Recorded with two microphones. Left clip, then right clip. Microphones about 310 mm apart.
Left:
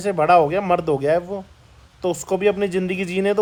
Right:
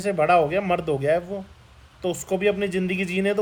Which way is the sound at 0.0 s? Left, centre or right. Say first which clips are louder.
Left 4 dB; centre.